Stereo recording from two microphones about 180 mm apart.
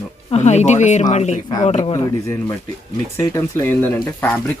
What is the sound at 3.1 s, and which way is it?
Speech, 15° left (ahead or behind).